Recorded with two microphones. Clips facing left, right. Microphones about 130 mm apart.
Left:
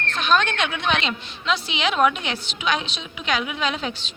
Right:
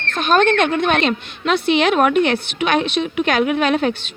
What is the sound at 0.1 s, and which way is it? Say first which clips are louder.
A woman's voice: right 7 dB; 50° right (ahead or behind).